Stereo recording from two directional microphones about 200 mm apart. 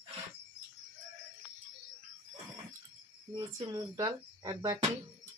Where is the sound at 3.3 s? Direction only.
15° right (ahead or behind).